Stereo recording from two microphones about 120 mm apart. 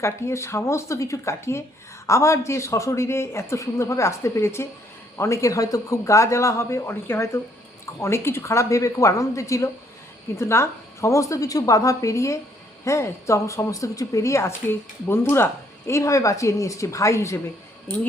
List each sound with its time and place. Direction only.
0.0 s a woman's voice: 25° left (ahead or behind)